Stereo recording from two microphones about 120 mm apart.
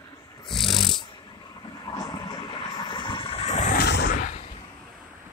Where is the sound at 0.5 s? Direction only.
Centre (ahead or behind).